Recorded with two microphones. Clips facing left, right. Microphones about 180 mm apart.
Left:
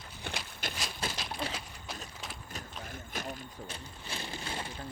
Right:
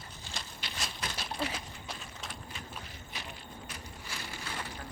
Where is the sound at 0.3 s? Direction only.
60° left (ahead or behind).